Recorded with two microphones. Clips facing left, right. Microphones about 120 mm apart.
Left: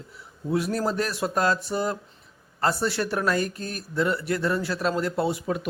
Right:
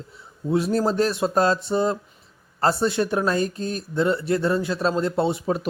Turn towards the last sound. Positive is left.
turn(degrees=-30)  # may be behind; listen again after turning